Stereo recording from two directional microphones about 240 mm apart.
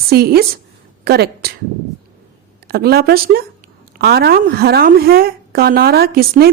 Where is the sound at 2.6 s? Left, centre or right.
Right.